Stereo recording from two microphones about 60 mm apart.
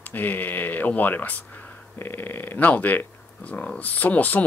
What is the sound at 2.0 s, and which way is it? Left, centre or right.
Speech, left.